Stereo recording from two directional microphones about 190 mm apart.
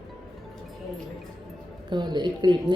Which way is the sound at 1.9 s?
25° right (ahead or behind).